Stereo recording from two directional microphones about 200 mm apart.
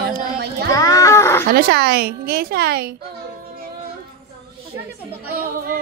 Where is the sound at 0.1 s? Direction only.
50° right (ahead or behind).